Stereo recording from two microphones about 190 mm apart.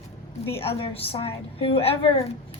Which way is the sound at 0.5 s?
30° left (ahead or behind).